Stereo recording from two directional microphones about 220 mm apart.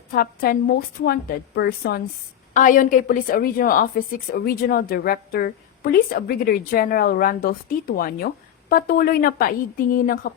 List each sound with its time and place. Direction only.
0.1 s a woman's voice: 40° left (ahead or behind)